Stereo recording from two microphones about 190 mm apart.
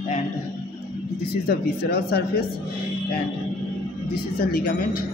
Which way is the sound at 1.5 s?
55° left (ahead or behind).